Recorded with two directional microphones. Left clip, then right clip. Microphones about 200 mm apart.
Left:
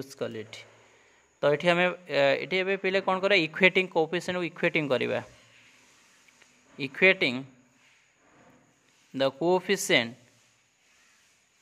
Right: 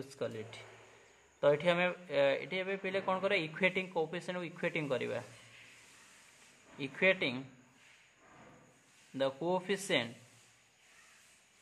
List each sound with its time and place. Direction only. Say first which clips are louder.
0.0 s a man's voice: left 5 dB; 45° left (ahead or behind)
6.8 s a man's voice: left 8 dB; 45° left (ahead or behind)
9.1 s a man's voice: left 9 dB; 45° left (ahead or behind)